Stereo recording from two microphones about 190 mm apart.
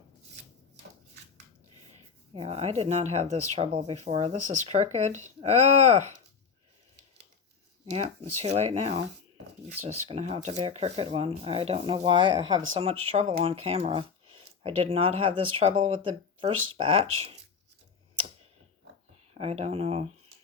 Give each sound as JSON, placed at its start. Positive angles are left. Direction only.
{"t": 2.3, "sound": "speech", "side_deg": -30}
{"t": 7.9, "sound": "speech", "side_deg": -35}
{"t": 19.3, "sound": "speech", "side_deg": -35}